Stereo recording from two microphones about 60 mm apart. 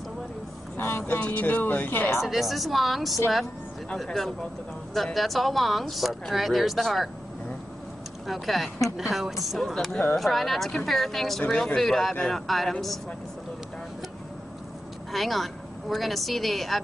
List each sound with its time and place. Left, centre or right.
0.7 s speech: left
1.2 s speech: left
2.2 s speech: centre
8.3 s speech: centre
15.1 s speech: centre